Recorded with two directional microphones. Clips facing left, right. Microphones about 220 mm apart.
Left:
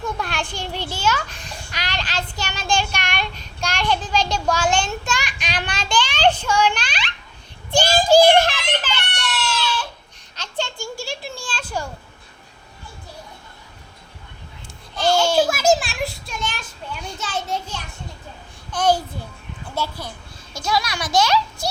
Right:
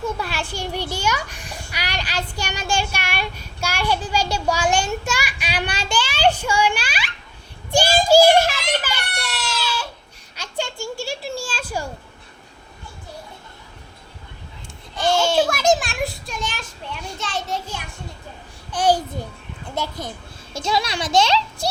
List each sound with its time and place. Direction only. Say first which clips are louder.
0.0 s a child's voice: right 1 dB; 5° right (ahead or behind)
10.3 s a sound: even; 10° right (ahead or behind)
14.9 s a child's voice: left 1 dB; centre (ahead or behind)
18.7 s a child's voice: even; 15° right (ahead or behind)
20.1 s a child's voice: right 3 dB; 25° right (ahead or behind)